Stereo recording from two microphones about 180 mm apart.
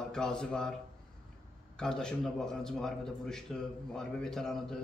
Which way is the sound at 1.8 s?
5° left (ahead or behind).